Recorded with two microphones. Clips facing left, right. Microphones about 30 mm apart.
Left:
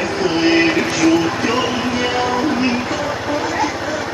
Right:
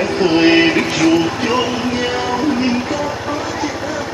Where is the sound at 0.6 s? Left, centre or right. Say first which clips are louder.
Right 1 dB; centre.